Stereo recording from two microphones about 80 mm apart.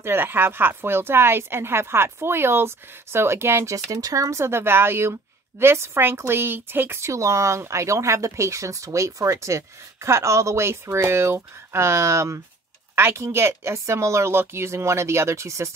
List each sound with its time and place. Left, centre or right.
0.0 s speech: right